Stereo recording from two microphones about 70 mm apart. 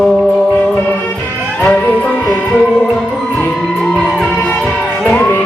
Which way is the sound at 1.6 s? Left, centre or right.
Centre.